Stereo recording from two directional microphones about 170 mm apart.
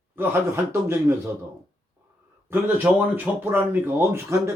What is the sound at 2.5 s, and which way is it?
A man's voice, 10° right (ahead or behind).